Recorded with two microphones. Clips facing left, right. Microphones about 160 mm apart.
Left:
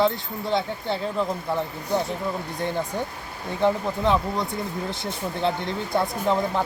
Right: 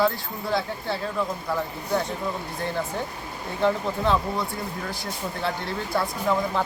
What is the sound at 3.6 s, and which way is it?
Speech, 15° left (ahead or behind).